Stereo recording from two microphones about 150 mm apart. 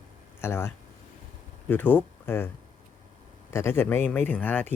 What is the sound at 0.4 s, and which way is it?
Speech, 15° left (ahead or behind).